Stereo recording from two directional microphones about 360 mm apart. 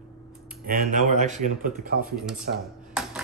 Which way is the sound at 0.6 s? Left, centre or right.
Right.